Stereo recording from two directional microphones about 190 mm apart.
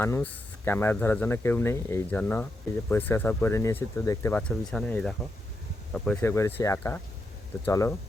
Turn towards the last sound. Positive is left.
turn(degrees=15)  # may be behind; listen again after turning